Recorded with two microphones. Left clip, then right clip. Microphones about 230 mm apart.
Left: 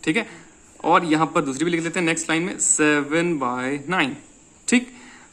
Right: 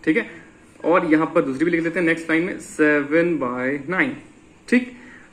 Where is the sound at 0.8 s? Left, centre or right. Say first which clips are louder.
Even; left.